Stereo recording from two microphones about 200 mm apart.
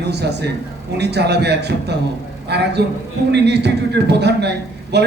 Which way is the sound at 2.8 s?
55° right (ahead or behind).